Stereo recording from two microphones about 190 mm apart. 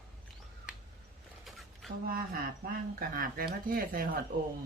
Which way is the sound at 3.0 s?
50° right (ahead or behind).